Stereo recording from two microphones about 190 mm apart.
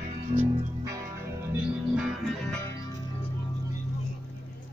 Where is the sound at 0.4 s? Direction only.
15° right (ahead or behind).